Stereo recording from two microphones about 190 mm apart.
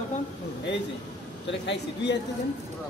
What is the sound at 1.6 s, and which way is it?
Speech, 65° left (ahead or behind).